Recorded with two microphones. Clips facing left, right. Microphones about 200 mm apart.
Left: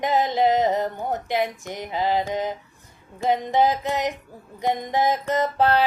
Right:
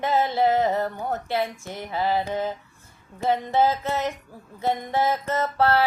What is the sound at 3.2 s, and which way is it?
Music, 15° left (ahead or behind).